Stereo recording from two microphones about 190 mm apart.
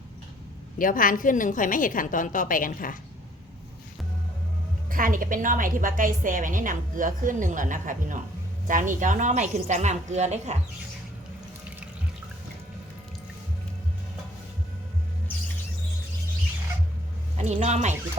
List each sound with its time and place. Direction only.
0.8 s a woman's voice: 45° left (ahead or behind)
4.9 s a woman's voice: 45° right (ahead or behind)
17.3 s a woman's voice: 35° right (ahead or behind)